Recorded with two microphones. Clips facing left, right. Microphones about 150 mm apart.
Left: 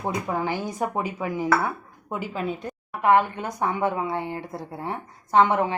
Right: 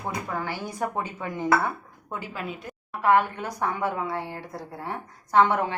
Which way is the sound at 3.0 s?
20° left (ahead or behind).